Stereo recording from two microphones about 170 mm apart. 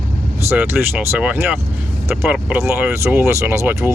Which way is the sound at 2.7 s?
15° right (ahead or behind).